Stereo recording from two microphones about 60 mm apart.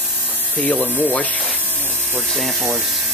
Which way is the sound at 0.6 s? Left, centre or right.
Centre.